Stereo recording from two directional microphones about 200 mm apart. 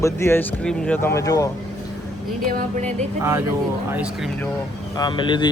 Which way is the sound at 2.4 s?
40° right (ahead or behind).